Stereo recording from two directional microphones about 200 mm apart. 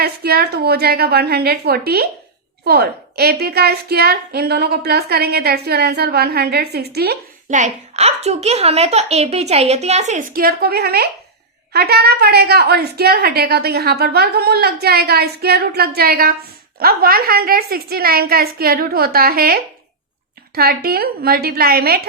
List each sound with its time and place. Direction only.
0.0 s a woman's voice: 50° right (ahead or behind)
7.5 s a woman's voice: 35° right (ahead or behind); by 22.0 s 50° right (ahead or behind)